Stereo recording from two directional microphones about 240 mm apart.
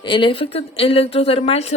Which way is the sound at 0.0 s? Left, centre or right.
Left.